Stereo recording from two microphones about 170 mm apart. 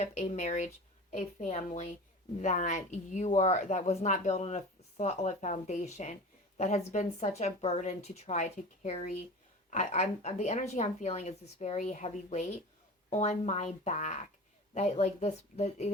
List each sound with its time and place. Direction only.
0.0 s a woman's voice: 45° left (ahead or behind)